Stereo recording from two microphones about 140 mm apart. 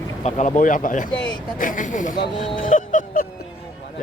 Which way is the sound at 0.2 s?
55° left (ahead or behind).